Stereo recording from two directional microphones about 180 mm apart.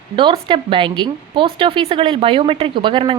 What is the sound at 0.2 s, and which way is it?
A woman's voice, 25° right (ahead or behind).